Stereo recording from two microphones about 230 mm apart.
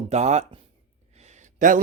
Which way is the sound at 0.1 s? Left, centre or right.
Right.